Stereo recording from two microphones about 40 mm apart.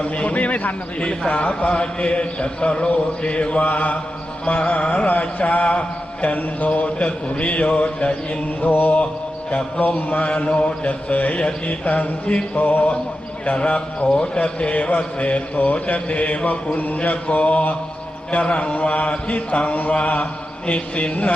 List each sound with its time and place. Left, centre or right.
0.0 s a man's voice: left
3.6 s a man's voice: left
8.6 s mantra: left
9.7 s a man's voice: left
11.3 s a man's voice: left
12.5 s a sound: left
13.6 s a man's voice: left
16.7 s a sound: left
17.0 s a man's voice: left